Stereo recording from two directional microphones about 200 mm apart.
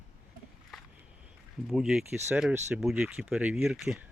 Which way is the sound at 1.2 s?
Centre (ahead or behind).